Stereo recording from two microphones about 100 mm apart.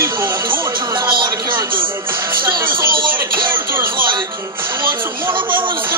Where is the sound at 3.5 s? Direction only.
25° right (ahead or behind).